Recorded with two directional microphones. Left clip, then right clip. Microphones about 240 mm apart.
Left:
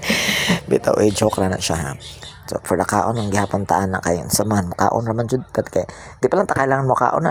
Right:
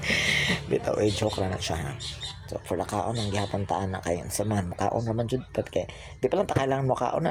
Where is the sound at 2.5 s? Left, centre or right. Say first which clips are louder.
Left 12 dB; left.